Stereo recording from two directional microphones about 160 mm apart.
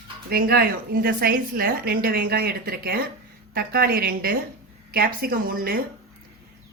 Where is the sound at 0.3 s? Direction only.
70° right (ahead or behind).